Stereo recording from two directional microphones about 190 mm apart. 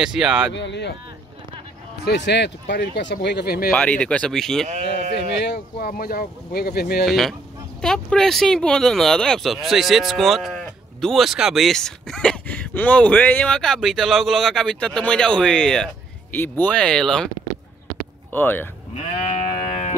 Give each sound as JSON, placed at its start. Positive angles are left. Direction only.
{"t": 0.0, "sound": "speech", "side_deg": -5}
{"t": 0.5, "sound": "speech", "side_deg": 65}
{"t": 2.0, "sound": "speech", "side_deg": 65}
{"t": 3.7, "sound": "speech", "side_deg": 5}
{"t": 5.1, "sound": "speech", "side_deg": 60}
{"t": 7.1, "sound": "speech", "side_deg": 0}
{"t": 18.3, "sound": "speech", "side_deg": 10}
{"t": 19.3, "sound": "sheep", "side_deg": 30}